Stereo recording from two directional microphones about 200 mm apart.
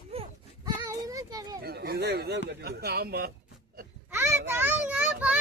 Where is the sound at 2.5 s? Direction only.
55° right (ahead or behind).